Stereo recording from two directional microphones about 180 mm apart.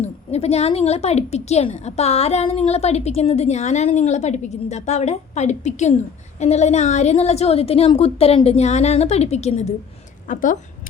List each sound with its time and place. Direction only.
0.0 s a woman's voice: 35° left (ahead or behind)